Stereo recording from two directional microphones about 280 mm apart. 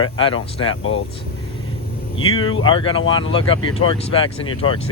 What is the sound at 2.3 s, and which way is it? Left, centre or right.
Speech, centre.